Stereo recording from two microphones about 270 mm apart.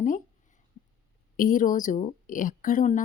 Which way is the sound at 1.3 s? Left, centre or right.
Left.